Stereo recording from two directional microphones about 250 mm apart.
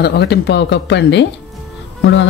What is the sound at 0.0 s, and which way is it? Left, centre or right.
Speech, left.